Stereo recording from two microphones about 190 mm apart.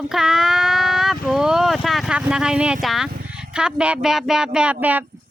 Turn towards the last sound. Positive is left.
turn(degrees=-10)  # may be behind; listen again after turning